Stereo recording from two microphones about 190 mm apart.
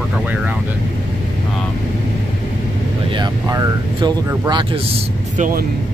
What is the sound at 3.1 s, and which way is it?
Speech, 20° right (ahead or behind).